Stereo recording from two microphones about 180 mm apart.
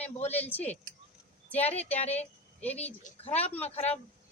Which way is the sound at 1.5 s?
35° left (ahead or behind).